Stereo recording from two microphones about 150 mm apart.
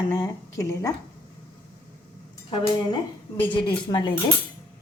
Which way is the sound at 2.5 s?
30° left (ahead or behind).